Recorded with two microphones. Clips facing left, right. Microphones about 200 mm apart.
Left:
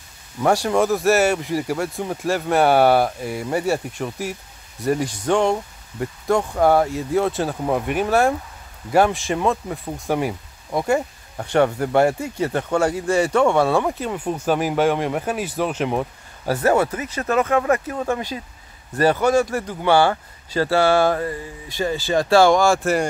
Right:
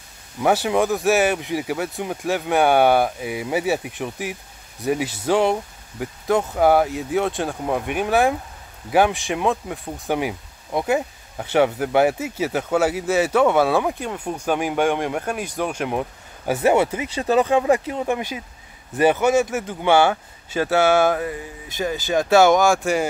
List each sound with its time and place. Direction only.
0.4 s speech: 5° right (ahead or behind)
16.4 s speech: 20° right (ahead or behind)
17.4 s speech: 15° right (ahead or behind)
21.1 s speech: 5° right (ahead or behind)
22.5 s speech: 20° right (ahead or behind)
22.8 s speech: centre (ahead or behind)